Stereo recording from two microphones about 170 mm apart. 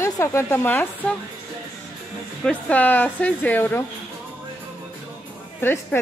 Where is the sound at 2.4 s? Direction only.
10° left (ahead or behind).